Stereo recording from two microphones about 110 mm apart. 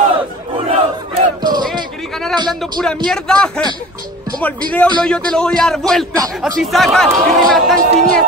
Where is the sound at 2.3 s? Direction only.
40° right (ahead or behind).